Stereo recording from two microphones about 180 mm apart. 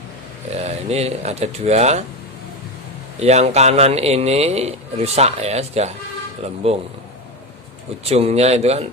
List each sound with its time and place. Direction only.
0.6 s a man's voice: 35° right (ahead or behind)
3.2 s a man's voice: 40° right (ahead or behind)
8.0 s a man's voice: 35° right (ahead or behind)